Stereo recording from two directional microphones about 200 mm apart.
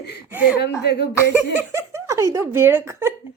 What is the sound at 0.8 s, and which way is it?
Speech, 55° left (ahead or behind).